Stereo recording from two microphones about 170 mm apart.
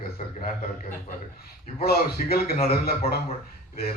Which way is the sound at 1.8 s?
65° left (ahead or behind).